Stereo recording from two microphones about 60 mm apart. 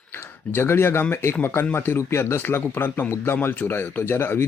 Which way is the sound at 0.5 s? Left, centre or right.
Left.